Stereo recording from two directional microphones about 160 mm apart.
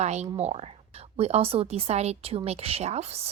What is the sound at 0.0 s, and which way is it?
A woman's voice, 45° right (ahead or behind).